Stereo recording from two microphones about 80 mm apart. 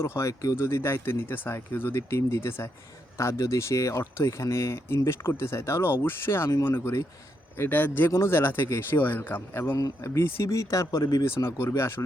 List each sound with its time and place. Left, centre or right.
0.0 s speech: left
9.7 s speech: left
10.2 s speech: left